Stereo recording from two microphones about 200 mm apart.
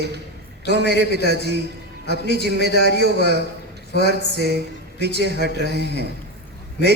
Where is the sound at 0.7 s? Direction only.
55° right (ahead or behind).